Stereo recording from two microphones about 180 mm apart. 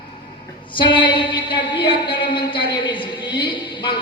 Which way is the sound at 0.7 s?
25° left (ahead or behind).